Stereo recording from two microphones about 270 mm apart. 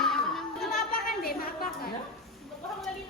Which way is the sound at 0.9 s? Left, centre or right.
Left.